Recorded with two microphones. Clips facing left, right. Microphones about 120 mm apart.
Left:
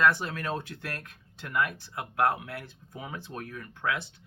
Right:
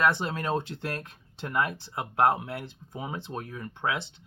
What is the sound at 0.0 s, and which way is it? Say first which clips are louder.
Speech: even; 25° right (ahead or behind).